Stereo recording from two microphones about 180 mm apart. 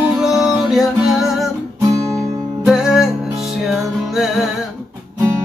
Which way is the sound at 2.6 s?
5° right (ahead or behind).